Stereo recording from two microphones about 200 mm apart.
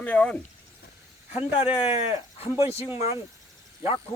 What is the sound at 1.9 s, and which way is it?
Speech, 30° left (ahead or behind).